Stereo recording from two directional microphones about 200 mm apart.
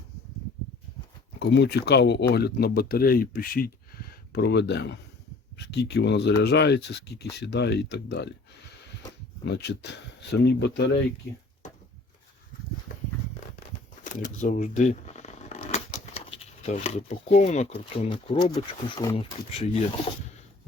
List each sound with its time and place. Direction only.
1.4 s speech: 55° left (ahead or behind)
4.3 s speech: 55° left (ahead or behind)
9.5 s speech: 55° left (ahead or behind)
14.0 s a sound: 40° left (ahead or behind)
16.6 s speech: 35° left (ahead or behind)